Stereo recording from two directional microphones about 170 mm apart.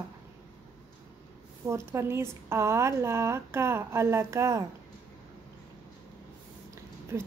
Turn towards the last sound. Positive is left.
turn(degrees=-15)  # may be behind; listen again after turning